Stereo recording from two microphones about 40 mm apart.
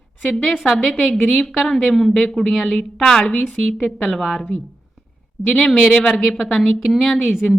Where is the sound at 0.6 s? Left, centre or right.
Centre.